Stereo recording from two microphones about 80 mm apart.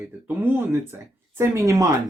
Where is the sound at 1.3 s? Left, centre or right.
Right.